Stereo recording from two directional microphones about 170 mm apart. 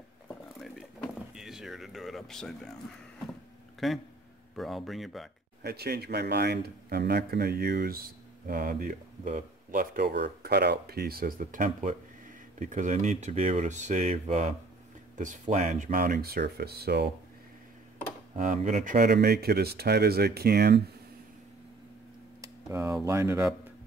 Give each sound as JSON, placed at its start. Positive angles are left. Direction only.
{"t": 0.6, "sound": "a sound", "side_deg": 0}
{"t": 3.8, "sound": "speech", "side_deg": 0}
{"t": 5.6, "sound": "speech", "side_deg": -70}
{"t": 15.5, "sound": "speech", "side_deg": -45}
{"t": 18.3, "sound": "speech", "side_deg": -45}
{"t": 22.4, "sound": "tick-tock", "side_deg": -15}
{"t": 23.0, "sound": "speech", "side_deg": -15}